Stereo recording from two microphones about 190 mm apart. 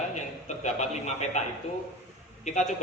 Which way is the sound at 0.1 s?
40° left (ahead or behind).